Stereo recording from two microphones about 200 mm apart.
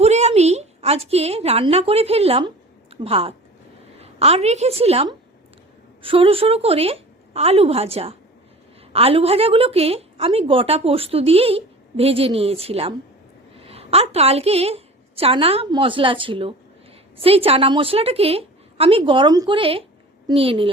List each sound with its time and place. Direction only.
0.0 s a woman's voice: 35° right (ahead or behind)